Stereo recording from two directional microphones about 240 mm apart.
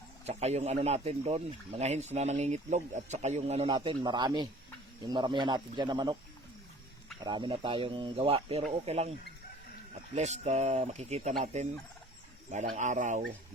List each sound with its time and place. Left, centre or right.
0.3 s speech: right
7.3 s speech: centre
10.2 s speech: right